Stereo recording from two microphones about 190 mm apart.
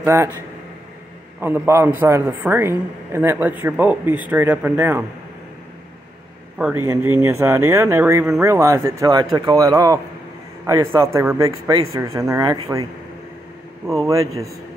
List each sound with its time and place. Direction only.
0.0 s speech: 15° right (ahead or behind)
1.4 s a man's voice: 15° right (ahead or behind)
6.6 s a man's voice: 15° right (ahead or behind)
13.8 s a man's voice: 15° right (ahead or behind)